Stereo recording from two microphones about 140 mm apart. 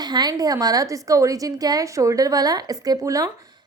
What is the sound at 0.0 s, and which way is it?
A woman's voice, 30° right (ahead or behind).